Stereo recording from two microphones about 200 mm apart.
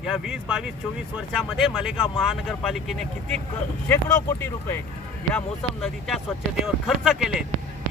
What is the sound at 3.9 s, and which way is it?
Speech, 10° left (ahead or behind).